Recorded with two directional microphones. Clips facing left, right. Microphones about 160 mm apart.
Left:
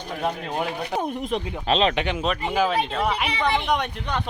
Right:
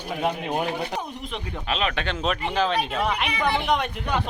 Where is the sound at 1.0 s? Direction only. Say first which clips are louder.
Left 7 dB; 45° left (ahead or behind).